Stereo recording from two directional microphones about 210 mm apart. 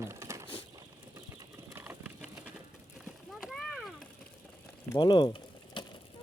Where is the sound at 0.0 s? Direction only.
15° right (ahead or behind).